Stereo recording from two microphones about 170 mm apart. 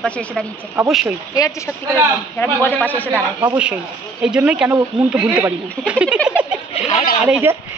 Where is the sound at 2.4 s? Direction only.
10° left (ahead or behind).